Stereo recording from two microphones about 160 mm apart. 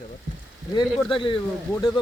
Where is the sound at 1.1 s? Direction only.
30° left (ahead or behind).